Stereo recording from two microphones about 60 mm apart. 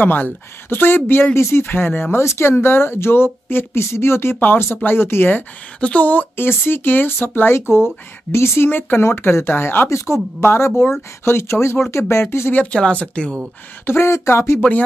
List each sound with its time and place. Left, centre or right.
0.0 s speech: left
1.3 s speech: left
5.8 s speech: left
8.6 s speech: left
9.8 s speech: left
10.4 s speech: left
12.7 s speech: centre
13.8 s speech: left